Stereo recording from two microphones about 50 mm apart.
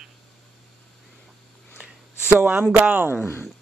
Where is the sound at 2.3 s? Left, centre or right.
Right.